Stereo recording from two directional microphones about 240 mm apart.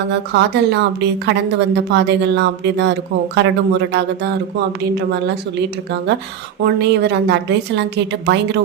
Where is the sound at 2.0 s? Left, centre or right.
Right.